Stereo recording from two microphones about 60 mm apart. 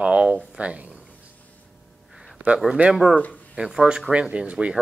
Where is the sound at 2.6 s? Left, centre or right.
Centre.